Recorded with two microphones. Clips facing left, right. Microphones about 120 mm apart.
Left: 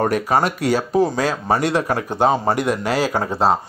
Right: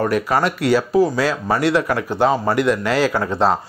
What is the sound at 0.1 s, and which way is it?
Speech, 25° left (ahead or behind).